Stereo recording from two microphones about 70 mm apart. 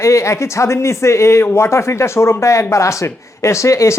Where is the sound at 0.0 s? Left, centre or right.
Left.